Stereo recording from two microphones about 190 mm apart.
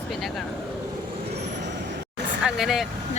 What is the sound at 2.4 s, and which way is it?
Speech, centre (ahead or behind).